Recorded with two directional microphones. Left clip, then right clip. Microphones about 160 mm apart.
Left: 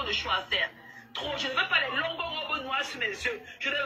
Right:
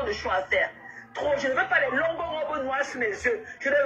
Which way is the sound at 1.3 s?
20° right (ahead or behind).